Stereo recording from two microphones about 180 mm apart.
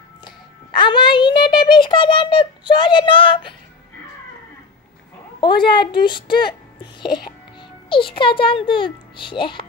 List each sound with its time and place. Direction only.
0.2 s a child's voice: 25° left (ahead or behind)
5.4 s a woman's voice: 25° left (ahead or behind)